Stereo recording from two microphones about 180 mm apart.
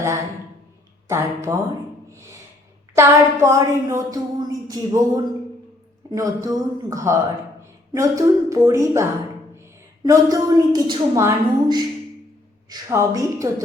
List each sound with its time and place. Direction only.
1.0 s speech: 15° right (ahead or behind)
2.9 s a woman's voice: 15° right (ahead or behind)